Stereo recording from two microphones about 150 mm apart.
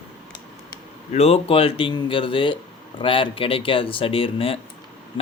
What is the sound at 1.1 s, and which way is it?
Speech, 40° left (ahead or behind).